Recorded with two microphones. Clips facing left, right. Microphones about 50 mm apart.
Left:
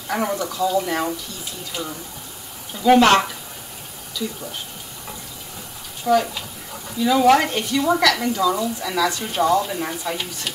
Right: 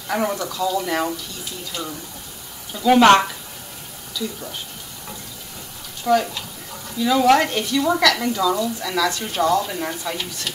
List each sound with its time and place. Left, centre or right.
0.1 s speech: centre
0.4 s speech: centre
2.7 s speech: centre
6.0 s speech: centre